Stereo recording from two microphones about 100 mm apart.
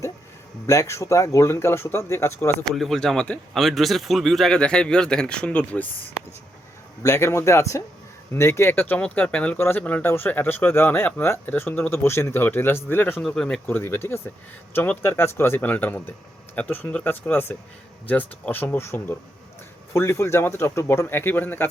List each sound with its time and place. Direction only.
0.7 s speech: 30° left (ahead or behind)
2.6 s speech: centre (ahead or behind)
7.0 s speech: 30° left (ahead or behind)
13.2 s speech: 10° left (ahead or behind)